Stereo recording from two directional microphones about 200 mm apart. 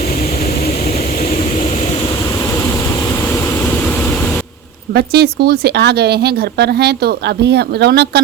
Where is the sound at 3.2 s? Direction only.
10° left (ahead or behind).